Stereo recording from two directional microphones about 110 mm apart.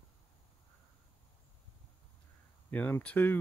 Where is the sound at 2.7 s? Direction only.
15° left (ahead or behind).